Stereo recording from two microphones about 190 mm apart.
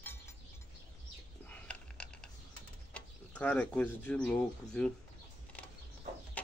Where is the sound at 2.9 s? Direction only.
5° left (ahead or behind).